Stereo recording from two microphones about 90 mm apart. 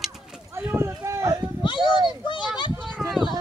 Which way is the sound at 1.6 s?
60° left (ahead or behind).